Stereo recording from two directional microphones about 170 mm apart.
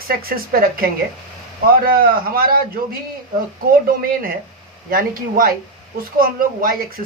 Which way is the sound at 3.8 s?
60° right (ahead or behind).